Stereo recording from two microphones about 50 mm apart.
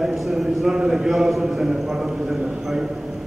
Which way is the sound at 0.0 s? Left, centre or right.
Centre.